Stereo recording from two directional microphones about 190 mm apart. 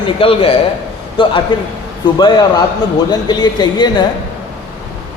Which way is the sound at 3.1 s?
20° left (ahead or behind).